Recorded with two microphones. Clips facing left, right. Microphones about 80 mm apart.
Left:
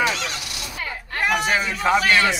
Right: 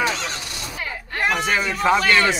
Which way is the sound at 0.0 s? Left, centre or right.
Right.